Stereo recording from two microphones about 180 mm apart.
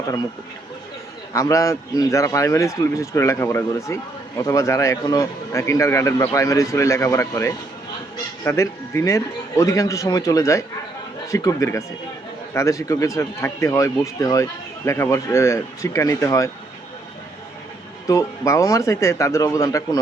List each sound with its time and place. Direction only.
1.3 s a man's voice: 15° left (ahead or behind)
18.1 s a man's voice: 15° left (ahead or behind)